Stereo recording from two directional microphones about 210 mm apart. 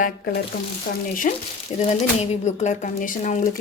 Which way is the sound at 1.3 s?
40° left (ahead or behind).